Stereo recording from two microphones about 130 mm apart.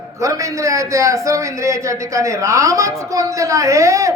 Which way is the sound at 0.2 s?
25° right (ahead or behind).